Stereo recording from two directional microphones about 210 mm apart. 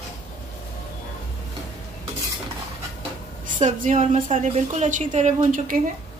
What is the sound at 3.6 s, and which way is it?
A woman's voice, 35° right (ahead or behind).